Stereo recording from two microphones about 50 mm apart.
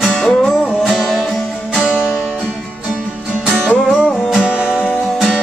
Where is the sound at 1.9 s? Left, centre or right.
Centre.